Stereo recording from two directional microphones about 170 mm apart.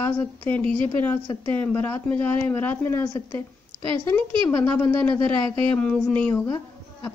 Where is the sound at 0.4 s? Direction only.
10° left (ahead or behind).